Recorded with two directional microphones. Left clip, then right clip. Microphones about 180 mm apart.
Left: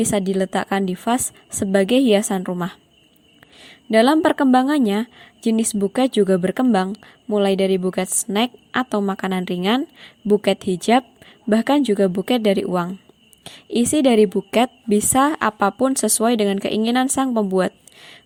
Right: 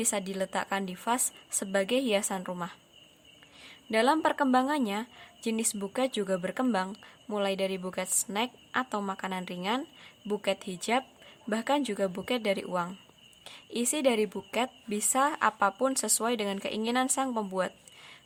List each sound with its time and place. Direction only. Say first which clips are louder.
0.0 s speech: left 11 dB; 30° left (ahead or behind)